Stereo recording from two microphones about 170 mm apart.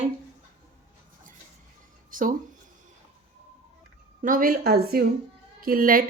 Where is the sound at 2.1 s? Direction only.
50° right (ahead or behind).